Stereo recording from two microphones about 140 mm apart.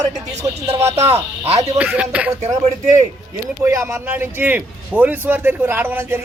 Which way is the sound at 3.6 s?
20° right (ahead or behind).